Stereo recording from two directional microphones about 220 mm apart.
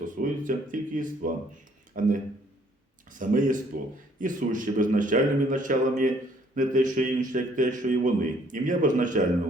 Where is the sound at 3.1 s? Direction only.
35° right (ahead or behind).